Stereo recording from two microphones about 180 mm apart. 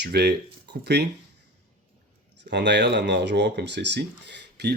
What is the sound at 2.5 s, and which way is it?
Speech, 75° right (ahead or behind).